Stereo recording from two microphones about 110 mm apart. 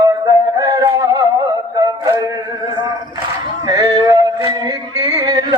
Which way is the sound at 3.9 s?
35° right (ahead or behind).